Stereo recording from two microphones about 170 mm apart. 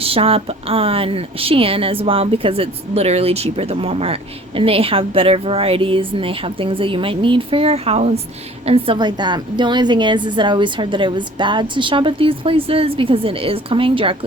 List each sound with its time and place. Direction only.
0.0 s a woman's voice: 35° right (ahead or behind)